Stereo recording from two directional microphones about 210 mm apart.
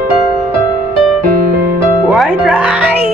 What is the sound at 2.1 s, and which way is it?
Speech, centre (ahead or behind).